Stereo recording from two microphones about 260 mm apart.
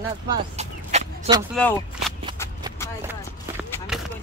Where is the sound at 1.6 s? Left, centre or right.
Centre.